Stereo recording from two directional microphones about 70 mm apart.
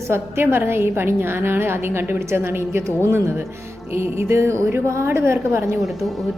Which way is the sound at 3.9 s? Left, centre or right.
Right.